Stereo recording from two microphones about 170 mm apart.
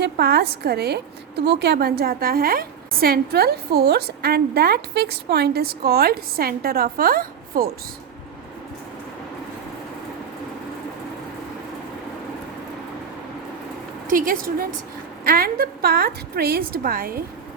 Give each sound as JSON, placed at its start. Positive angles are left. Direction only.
{"t": 0.0, "sound": "a woman's voice", "side_deg": -75}
{"t": 14.1, "sound": "a woman's voice", "side_deg": -55}